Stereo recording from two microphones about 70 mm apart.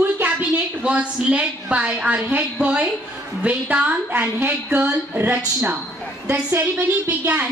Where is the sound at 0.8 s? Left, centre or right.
Centre.